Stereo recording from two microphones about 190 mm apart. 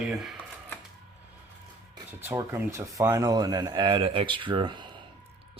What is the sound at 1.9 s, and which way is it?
Speech, 15° right (ahead or behind).